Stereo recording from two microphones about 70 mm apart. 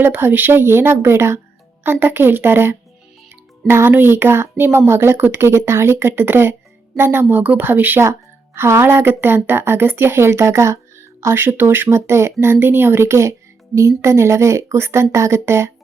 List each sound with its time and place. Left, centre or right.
0.0 s speech: right